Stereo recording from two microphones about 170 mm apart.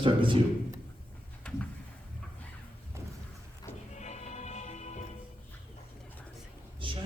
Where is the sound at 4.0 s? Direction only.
45° left (ahead or behind).